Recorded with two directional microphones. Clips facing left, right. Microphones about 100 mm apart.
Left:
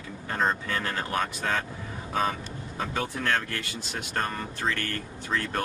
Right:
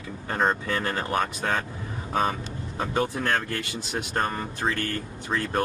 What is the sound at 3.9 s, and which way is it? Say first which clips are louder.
Speech: right 3 dB; 25° right (ahead or behind).